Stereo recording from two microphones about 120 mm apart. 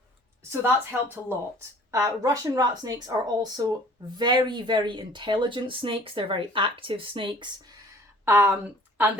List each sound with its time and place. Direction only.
0.6 s a woman's voice: 20° right (ahead or behind)
1.9 s speech: 30° right (ahead or behind)
8.2 s speech: 15° right (ahead or behind)